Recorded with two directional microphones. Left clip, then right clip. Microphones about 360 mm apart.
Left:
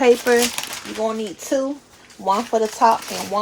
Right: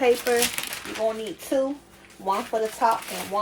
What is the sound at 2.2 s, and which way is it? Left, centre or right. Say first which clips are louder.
Speech: left 6 dB; left.